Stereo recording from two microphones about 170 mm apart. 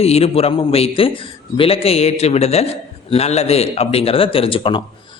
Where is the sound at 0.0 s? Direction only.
35° left (ahead or behind).